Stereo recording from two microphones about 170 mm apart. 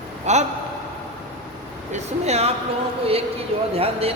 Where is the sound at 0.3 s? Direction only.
40° right (ahead or behind).